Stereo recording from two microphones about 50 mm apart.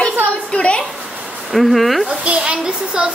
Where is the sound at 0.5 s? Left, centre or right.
Left.